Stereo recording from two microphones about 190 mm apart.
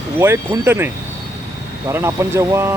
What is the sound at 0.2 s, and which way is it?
Speech, 15° right (ahead or behind).